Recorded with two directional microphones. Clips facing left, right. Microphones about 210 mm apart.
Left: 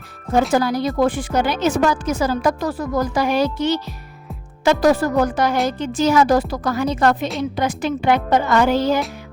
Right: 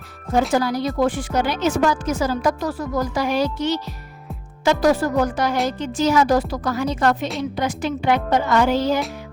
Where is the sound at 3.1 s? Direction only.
55° left (ahead or behind).